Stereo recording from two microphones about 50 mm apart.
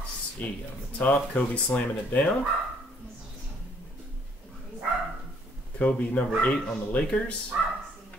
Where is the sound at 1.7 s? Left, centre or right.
Centre.